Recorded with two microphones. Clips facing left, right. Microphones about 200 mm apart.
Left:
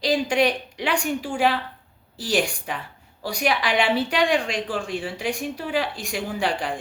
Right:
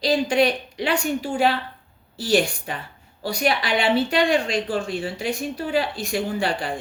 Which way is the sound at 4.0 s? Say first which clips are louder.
Right 2 dB; 15° left (ahead or behind).